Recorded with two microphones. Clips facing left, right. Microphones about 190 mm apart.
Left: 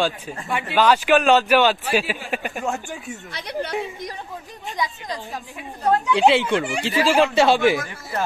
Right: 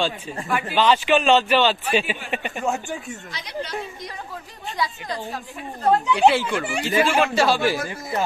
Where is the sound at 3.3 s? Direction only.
60° left (ahead or behind).